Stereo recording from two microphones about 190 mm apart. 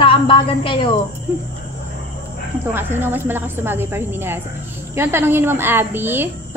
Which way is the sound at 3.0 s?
10° right (ahead or behind).